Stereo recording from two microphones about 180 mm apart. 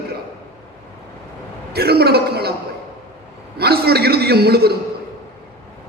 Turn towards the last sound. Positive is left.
turn(degrees=-60)  # may be behind; listen again after turning